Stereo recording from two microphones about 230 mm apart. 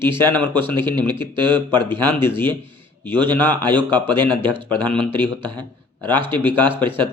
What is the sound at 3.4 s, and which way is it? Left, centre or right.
Speech, centre.